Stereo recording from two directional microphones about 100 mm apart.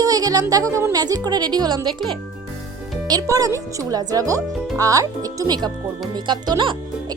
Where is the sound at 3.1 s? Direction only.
40° right (ahead or behind).